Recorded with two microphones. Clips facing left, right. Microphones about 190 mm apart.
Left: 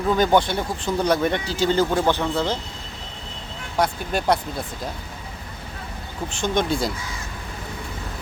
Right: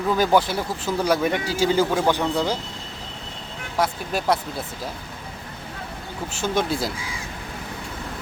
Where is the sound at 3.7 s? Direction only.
Centre (ahead or behind).